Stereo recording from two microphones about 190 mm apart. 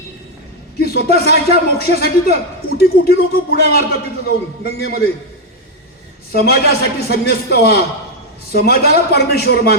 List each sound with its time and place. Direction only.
0.8 s a sound: 55° left (ahead or behind)
1.1 s a man's voice: 55° left (ahead or behind)
6.3 s a man's voice: 55° left (ahead or behind)